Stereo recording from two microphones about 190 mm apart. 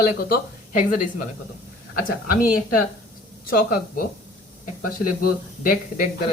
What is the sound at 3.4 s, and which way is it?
Speech, 50° left (ahead or behind).